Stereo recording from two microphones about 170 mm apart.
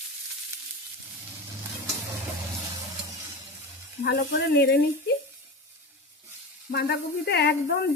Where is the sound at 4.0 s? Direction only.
70° left (ahead or behind).